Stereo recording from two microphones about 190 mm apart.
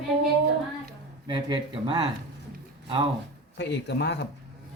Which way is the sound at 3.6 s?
65° left (ahead or behind).